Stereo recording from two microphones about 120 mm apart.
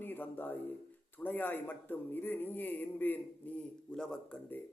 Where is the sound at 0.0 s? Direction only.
15° left (ahead or behind).